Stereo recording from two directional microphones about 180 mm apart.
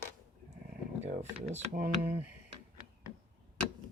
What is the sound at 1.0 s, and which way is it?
Speech, 40° right (ahead or behind).